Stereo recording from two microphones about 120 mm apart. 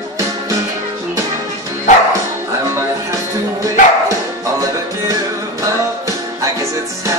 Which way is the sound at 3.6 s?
25° right (ahead or behind).